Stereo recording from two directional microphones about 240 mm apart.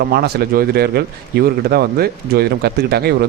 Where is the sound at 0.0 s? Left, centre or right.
Right.